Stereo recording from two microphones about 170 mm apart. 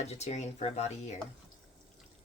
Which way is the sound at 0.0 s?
40° left (ahead or behind).